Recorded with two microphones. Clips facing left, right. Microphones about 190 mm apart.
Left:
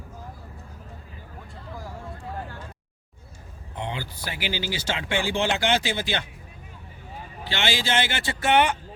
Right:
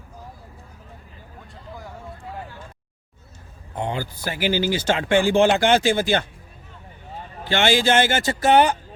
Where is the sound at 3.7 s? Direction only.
45° right (ahead or behind).